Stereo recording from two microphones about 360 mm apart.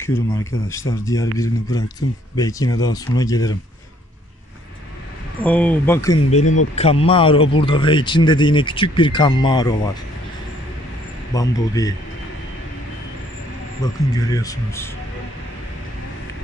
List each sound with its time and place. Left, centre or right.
0.0 s speech: centre
5.4 s speech: centre
6.3 s speech: centre
11.3 s speech: centre
13.8 s speech: centre